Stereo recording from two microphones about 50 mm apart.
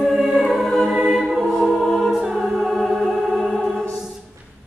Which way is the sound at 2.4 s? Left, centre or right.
Centre.